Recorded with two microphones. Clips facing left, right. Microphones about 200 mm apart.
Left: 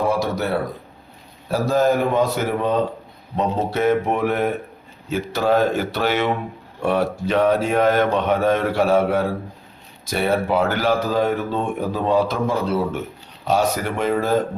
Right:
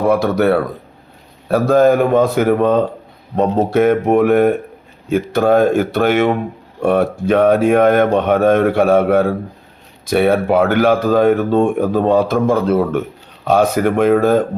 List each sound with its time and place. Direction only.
0.1 s speech: 60° right (ahead or behind)